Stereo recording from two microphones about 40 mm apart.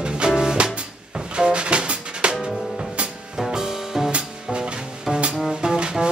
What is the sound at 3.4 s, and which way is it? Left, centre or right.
Music, centre.